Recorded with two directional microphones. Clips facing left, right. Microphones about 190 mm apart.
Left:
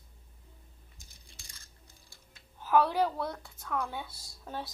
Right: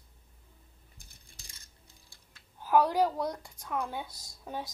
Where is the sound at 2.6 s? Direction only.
10° right (ahead or behind).